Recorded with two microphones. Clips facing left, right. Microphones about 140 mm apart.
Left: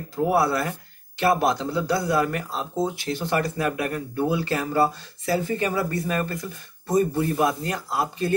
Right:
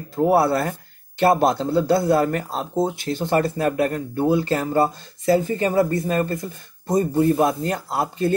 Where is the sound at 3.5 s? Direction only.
35° right (ahead or behind).